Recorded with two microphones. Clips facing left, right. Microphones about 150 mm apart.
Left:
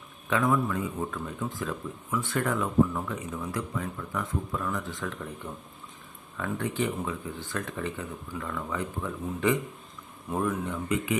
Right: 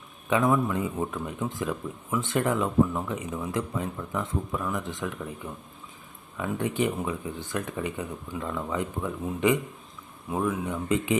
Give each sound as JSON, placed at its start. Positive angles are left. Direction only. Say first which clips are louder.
{"t": 0.3, "sound": "a man's voice", "louder": "right 2 dB", "side_deg": -20}
{"t": 10.2, "sound": "speech", "louder": "right 1 dB", "side_deg": -5}
{"t": 10.8, "sound": "a man's voice", "louder": "right 4 dB", "side_deg": -25}